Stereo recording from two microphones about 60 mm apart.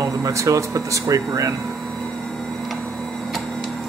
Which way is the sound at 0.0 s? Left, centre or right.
Right.